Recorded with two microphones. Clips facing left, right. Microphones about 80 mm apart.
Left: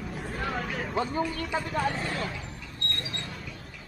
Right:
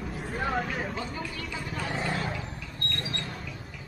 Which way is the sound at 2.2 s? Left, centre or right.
Right.